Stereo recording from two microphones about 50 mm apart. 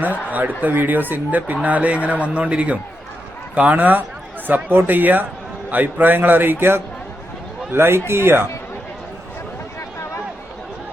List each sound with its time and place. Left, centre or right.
0.0 s a man's voice: right